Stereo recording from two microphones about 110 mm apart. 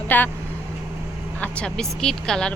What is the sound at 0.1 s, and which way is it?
Speech, 15° left (ahead or behind).